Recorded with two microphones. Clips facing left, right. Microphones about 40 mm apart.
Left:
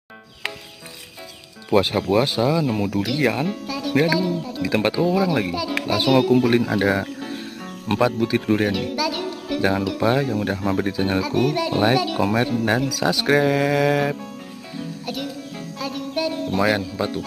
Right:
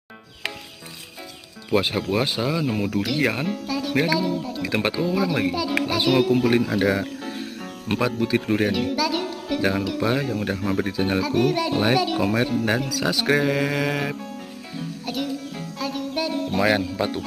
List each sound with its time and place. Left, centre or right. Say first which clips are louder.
1.7 s speech: left 4 dB; centre
3.2 s speech: left 3 dB; centre
3.4 s speech: even; centre
6.5 s speech: left 1 dB; centre
7.2 s speech: even; centre
10.2 s speech: left 3 dB; centre
10.5 s speech: left 2 dB; centre
12.2 s speech: left 1 dB; centre
12.8 s speech: left 2 dB; centre
13.3 s speech: left 4 dB; centre
15.0 s music: right 4 dB; centre